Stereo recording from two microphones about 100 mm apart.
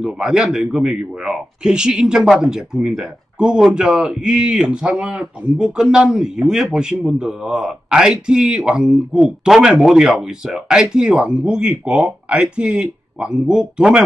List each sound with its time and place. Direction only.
0.0 s a man's voice: 5° right (ahead or behind)